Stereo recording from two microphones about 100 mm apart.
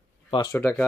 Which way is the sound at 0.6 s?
25° left (ahead or behind).